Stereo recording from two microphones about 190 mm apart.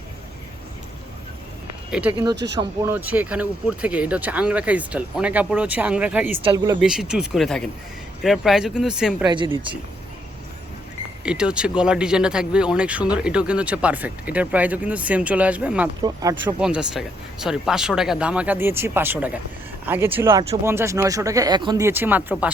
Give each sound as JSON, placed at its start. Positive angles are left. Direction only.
{"t": 1.9, "sound": "speech", "side_deg": -5}
{"t": 6.4, "sound": "speech", "side_deg": -20}
{"t": 6.7, "sound": "speech", "side_deg": -5}
{"t": 9.2, "sound": "speech", "side_deg": -25}
{"t": 11.2, "sound": "speech", "side_deg": -5}
{"t": 16.0, "sound": "speech", "side_deg": -20}
{"t": 16.6, "sound": "speech", "side_deg": -5}